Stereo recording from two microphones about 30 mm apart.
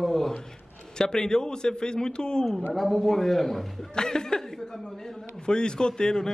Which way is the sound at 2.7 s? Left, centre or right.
Centre.